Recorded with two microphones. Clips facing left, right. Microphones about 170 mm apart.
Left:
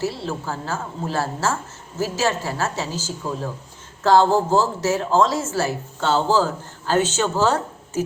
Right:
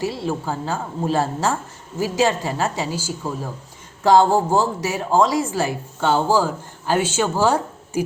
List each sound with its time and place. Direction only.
0.0 s speech: 15° right (ahead or behind)